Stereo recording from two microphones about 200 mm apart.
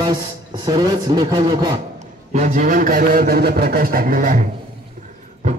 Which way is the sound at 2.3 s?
40° right (ahead or behind).